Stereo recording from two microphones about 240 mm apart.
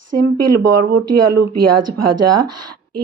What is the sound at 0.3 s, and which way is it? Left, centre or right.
Speech, right.